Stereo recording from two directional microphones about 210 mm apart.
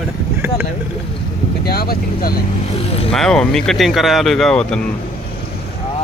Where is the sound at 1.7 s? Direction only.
45° left (ahead or behind).